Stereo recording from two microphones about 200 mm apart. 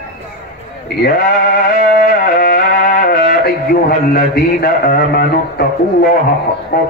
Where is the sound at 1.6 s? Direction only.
45° left (ahead or behind).